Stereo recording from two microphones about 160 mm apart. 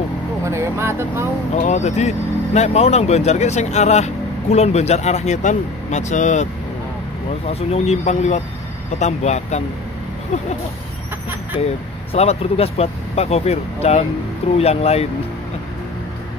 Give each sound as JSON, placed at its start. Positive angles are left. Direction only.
{"t": 0.5, "sound": "speech", "side_deg": -15}
{"t": 1.6, "sound": "speech", "side_deg": 45}
{"t": 7.4, "sound": "speech", "side_deg": 45}
{"t": 11.6, "sound": "speech", "side_deg": 40}